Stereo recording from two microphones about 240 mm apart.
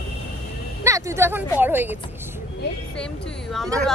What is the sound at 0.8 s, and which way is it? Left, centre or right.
A woman's voice, centre.